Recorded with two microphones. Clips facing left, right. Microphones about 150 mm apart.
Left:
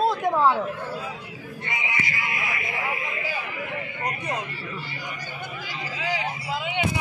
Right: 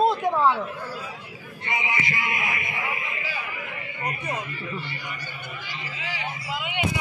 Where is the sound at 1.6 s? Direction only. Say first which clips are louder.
Right 3 dB; 25° right (ahead or behind).